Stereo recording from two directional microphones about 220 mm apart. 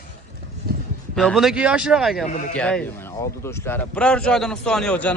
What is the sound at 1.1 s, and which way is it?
A man's voice, centre (ahead or behind).